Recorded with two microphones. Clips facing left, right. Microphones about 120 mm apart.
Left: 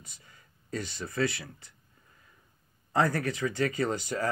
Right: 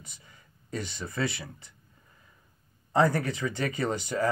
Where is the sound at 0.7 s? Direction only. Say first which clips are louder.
Left 1 dB; 25° right (ahead or behind).